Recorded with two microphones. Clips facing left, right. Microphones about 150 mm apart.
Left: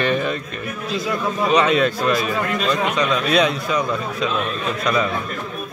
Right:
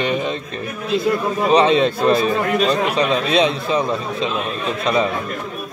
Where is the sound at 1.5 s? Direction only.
30° right (ahead or behind).